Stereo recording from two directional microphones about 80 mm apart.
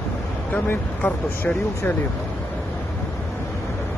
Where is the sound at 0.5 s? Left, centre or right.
Centre.